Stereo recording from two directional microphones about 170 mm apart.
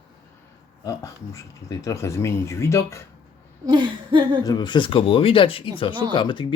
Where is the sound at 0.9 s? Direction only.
20° left (ahead or behind).